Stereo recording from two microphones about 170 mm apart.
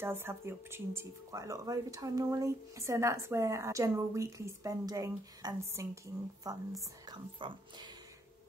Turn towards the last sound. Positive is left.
turn(degrees=-25)  # may be behind; listen again after turning